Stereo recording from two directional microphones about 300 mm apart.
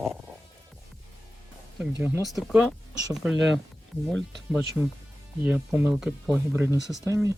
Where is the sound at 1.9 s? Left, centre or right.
Centre.